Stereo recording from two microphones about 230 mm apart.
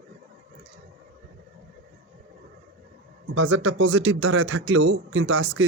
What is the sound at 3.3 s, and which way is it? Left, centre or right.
Speech, right.